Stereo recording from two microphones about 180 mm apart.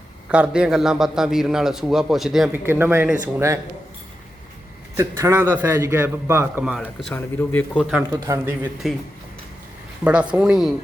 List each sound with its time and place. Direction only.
0.3 s a man's voice: 5° right (ahead or behind)
2.6 s a man's voice: 10° right (ahead or behind)
4.9 s a man's voice: 15° right (ahead or behind)
6.7 s a man's voice: centre (ahead or behind)
7.8 s a man's voice: 5° right (ahead or behind)
8.1 s a man's voice: 15° right (ahead or behind)
10.0 s a man's voice: 5° right (ahead or behind)